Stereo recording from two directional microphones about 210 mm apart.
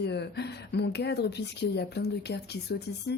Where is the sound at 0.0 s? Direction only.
50° left (ahead or behind).